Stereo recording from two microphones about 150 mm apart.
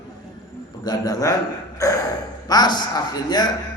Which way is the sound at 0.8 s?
25° left (ahead or behind).